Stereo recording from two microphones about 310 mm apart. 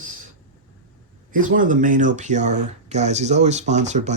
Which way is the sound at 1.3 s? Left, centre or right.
Right.